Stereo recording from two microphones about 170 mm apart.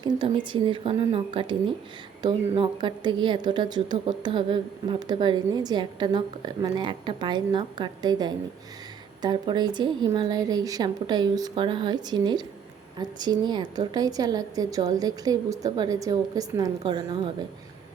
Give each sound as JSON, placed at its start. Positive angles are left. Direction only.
{"t": 0.0, "sound": "a woman's voice", "side_deg": -30}